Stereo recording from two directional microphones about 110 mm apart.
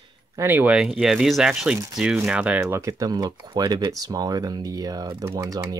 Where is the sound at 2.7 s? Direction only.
30° right (ahead or behind).